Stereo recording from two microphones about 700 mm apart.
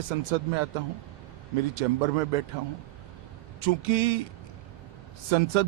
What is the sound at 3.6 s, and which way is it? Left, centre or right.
Speech, right.